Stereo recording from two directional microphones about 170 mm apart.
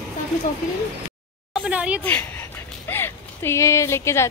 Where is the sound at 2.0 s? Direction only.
10° left (ahead or behind).